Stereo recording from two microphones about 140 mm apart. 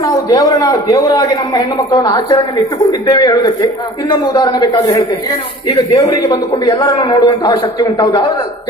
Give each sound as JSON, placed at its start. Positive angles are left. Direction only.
{"t": 0.0, "sound": "a man's voice", "side_deg": 25}